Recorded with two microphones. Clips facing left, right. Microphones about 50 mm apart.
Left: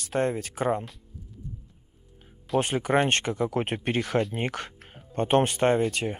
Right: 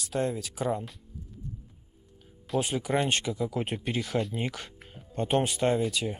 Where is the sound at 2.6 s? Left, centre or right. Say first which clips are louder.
Left 4 dB; left.